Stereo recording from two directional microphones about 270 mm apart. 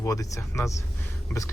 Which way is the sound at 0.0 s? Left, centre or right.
Centre.